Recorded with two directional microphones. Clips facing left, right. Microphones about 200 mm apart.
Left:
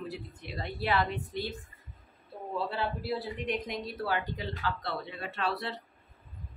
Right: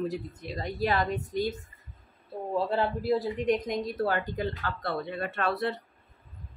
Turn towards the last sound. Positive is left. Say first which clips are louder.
# right 5 dB
turn(degrees=-50)  # may be behind; listen again after turning